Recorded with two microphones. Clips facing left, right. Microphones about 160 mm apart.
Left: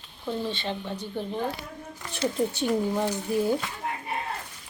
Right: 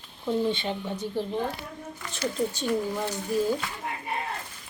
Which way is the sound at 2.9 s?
15° left (ahead or behind).